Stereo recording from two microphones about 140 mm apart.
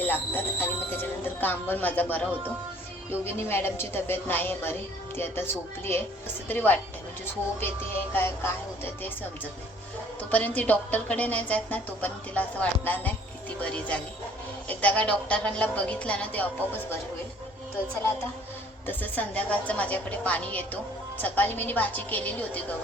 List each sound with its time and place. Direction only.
0.0 s a woman's voice: 15° left (ahead or behind)
3.2 s a woman's voice: 15° left (ahead or behind)
8.1 s a woman's voice: 15° left (ahead or behind)
10.3 s a woman's voice: 10° left (ahead or behind)
18.9 s a woman's voice: 10° left (ahead or behind)